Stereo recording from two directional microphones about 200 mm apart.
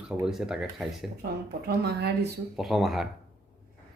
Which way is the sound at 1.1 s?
50° right (ahead or behind).